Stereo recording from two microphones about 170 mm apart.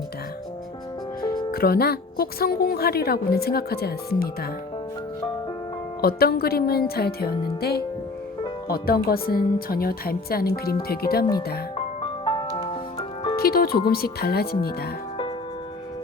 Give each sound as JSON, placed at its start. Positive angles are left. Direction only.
{"t": 1.5, "sound": "speech", "side_deg": 60}
{"t": 6.0, "sound": "speech", "side_deg": 65}
{"t": 12.2, "sound": "music", "side_deg": 30}
{"t": 13.3, "sound": "speech", "side_deg": 65}